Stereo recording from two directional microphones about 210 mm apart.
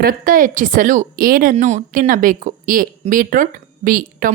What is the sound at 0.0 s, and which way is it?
Speech, 40° right (ahead or behind).